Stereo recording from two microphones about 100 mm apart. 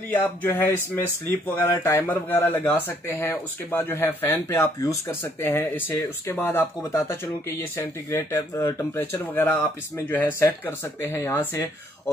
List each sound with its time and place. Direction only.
0.1 s speech: 20° left (ahead or behind)